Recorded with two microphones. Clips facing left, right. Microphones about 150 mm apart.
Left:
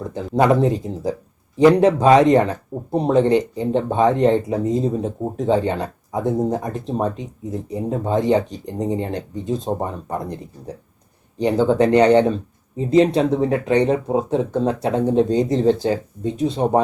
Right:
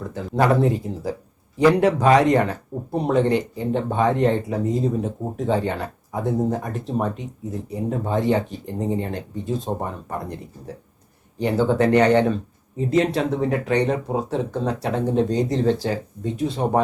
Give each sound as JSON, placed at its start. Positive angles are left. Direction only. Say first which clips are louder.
{"t": 0.1, "sound": "speech", "louder": "left 3 dB", "side_deg": 20}
{"t": 11.3, "sound": "speech", "louder": "left 3 dB", "side_deg": 20}